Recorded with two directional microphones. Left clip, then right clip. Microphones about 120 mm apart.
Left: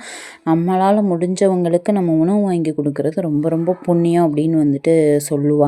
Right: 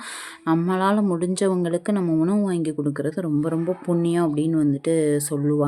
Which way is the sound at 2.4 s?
25° left (ahead or behind).